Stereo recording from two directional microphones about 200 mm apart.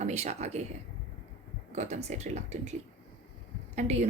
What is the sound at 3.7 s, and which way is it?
Speech, 35° right (ahead or behind).